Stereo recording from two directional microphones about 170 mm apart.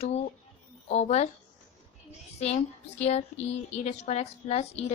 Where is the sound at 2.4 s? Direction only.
40° left (ahead or behind).